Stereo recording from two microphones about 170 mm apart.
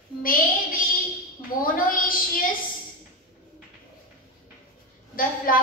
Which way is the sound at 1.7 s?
55° left (ahead or behind).